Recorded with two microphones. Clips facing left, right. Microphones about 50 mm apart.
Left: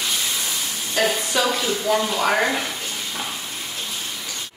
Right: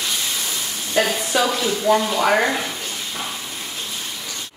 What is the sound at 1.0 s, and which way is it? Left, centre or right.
Speech, centre.